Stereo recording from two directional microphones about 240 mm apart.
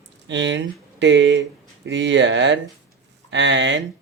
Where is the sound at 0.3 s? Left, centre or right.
Right.